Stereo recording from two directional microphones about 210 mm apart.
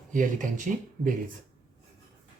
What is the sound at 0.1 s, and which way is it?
Speech, 40° right (ahead or behind).